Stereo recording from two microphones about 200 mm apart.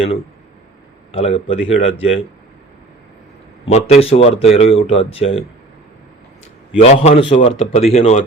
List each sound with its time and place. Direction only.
1.1 s speech: 30° left (ahead or behind)
3.7 s speech: 35° left (ahead or behind)
6.8 s speech: 35° left (ahead or behind)